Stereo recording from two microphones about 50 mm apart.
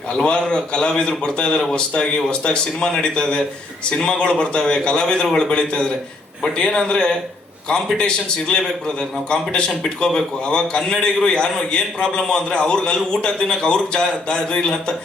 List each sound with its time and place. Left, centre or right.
0.1 s a man's voice: centre